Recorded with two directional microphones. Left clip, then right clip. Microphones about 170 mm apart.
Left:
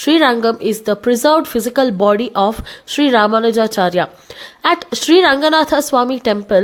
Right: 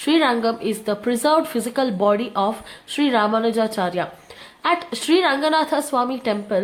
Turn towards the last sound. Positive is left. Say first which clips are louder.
# left 8 dB
turn(degrees=45)  # may be behind; listen again after turning